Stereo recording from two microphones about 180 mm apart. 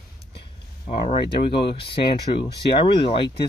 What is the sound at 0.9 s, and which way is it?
Speech, 30° left (ahead or behind).